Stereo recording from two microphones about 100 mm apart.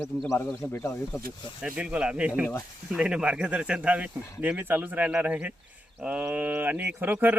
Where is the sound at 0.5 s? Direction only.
25° left (ahead or behind).